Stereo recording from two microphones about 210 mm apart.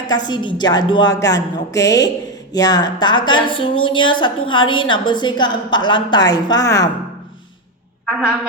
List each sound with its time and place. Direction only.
0.3 s a woman's voice: 20° left (ahead or behind)
8.0 s a woman's voice: 5° right (ahead or behind)